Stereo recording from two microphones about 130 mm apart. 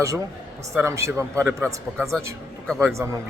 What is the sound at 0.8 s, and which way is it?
A man's voice, 20° right (ahead or behind).